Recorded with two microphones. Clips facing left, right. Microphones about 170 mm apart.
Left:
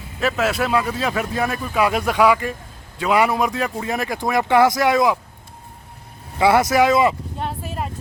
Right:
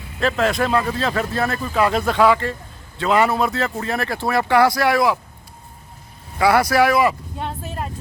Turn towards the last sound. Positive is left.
turn(degrees=5)  # may be behind; listen again after turning